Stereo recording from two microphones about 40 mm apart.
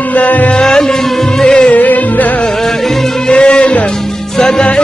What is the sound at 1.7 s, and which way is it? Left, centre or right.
Music, left.